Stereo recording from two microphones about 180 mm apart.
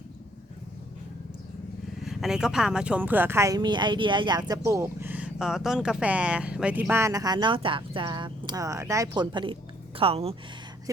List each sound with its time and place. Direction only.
2.0 s speech: 5° right (ahead or behind); by 10.3 s 35° right (ahead or behind)